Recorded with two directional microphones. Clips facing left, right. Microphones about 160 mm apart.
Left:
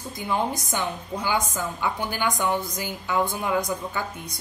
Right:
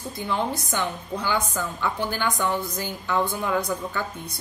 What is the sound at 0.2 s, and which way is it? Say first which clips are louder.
A woman's voice: left 1 dB; 15° left (ahead or behind).